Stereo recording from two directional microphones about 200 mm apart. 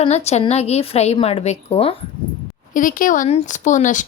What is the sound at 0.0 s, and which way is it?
Speech, 30° left (ahead or behind).